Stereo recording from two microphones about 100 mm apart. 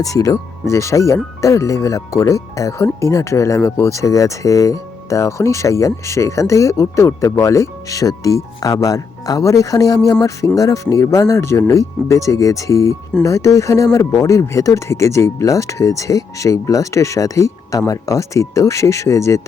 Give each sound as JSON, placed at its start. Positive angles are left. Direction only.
{"t": 0.0, "sound": "speech", "side_deg": 35}